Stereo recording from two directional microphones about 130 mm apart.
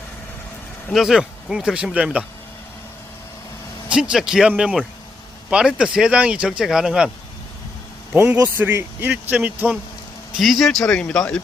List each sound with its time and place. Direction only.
0.9 s speech: centre (ahead or behind)
3.8 s speech: 10° right (ahead or behind)
8.1 s speech: 15° right (ahead or behind)
10.3 s speech: centre (ahead or behind)